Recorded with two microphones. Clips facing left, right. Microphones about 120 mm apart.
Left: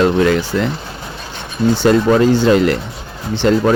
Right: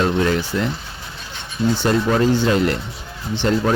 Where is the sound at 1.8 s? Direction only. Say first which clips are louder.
Left 7 dB; 90° left.